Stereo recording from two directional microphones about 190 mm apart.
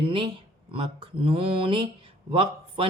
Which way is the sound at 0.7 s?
30° right (ahead or behind).